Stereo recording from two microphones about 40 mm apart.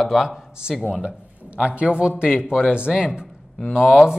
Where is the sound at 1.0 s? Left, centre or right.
Right; by 4.1 s centre.